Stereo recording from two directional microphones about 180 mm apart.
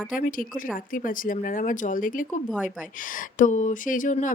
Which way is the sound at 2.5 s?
Centre (ahead or behind).